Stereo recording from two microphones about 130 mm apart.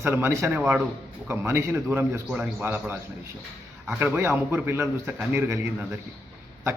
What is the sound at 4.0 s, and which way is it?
A man's voice, 15° right (ahead or behind).